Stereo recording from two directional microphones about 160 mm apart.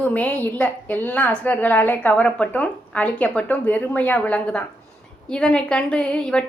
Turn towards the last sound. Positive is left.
turn(degrees=5)  # may be behind; listen again after turning